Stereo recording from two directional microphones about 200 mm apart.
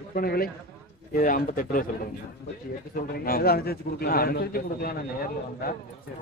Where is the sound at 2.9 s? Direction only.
45° left (ahead or behind).